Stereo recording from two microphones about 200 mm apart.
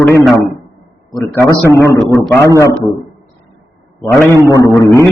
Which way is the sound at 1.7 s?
10° left (ahead or behind).